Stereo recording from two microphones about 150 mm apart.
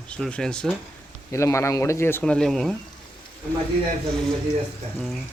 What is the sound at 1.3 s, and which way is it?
Speech, 20° left (ahead or behind).